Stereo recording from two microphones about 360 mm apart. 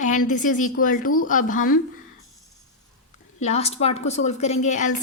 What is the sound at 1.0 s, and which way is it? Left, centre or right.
Speech, left.